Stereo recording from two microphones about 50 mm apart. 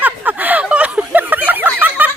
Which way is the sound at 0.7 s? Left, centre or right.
Right.